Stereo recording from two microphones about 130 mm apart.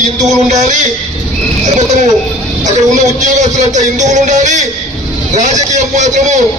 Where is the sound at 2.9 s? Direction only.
70° right (ahead or behind).